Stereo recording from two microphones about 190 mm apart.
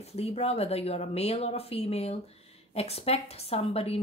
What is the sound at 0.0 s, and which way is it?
Speech, 35° left (ahead or behind).